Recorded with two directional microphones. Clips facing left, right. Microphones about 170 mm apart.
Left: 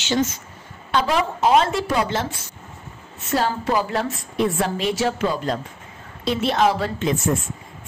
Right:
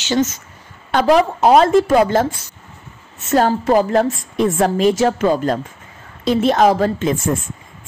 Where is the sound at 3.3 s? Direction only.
50° right (ahead or behind).